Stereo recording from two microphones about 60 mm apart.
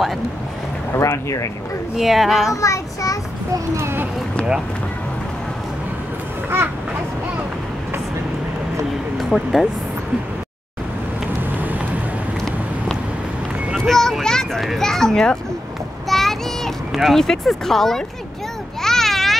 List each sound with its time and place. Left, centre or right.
0.9 s a child's voice: left
2.0 s a child's voice: centre
2.5 s a child's voice: left
3.7 s a child's voice: right
9.2 s speech: centre
11.5 s vehicle: right
13.7 s a sound: centre
14.6 s children playing: centre
16.1 s a sound: centre